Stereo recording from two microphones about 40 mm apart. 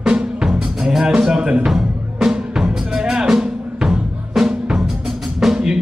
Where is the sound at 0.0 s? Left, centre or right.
Centre.